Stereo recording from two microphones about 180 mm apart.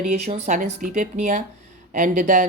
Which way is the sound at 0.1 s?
40° right (ahead or behind).